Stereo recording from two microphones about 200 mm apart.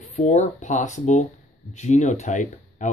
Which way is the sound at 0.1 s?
35° left (ahead or behind).